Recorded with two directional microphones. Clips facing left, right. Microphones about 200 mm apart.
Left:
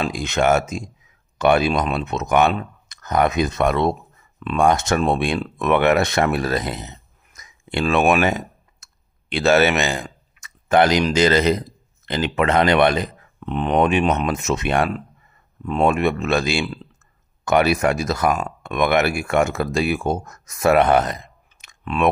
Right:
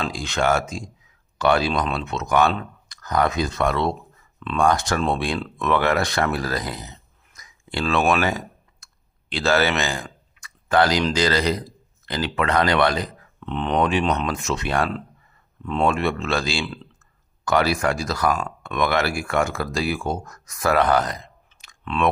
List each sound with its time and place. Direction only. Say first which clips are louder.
0.0 s speech: left 3 dB; 20° left (ahead or behind)